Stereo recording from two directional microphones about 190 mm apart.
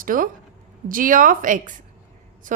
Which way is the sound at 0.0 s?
45° right (ahead or behind).